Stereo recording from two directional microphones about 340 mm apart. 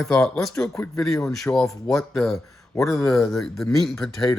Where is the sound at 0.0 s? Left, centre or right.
Centre.